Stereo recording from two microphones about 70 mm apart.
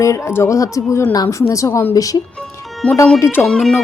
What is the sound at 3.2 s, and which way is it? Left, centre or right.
Speech, left.